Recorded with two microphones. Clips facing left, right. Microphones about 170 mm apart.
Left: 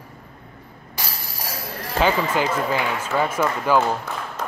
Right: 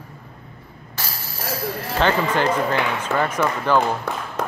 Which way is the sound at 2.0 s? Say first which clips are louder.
Right 1 dB; 5° left (ahead or behind).